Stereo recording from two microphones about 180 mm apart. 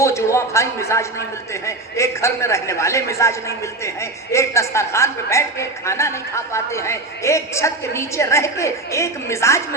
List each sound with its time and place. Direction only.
0.0 s a woman's voice: 15° left (ahead or behind)